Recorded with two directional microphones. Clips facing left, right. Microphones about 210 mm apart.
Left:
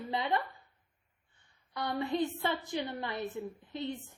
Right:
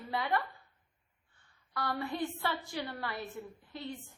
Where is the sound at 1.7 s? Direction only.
20° left (ahead or behind).